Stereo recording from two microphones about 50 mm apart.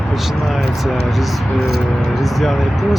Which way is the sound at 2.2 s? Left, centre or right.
Centre.